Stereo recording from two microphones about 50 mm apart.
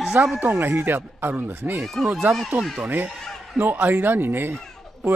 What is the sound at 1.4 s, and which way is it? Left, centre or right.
Speech, right.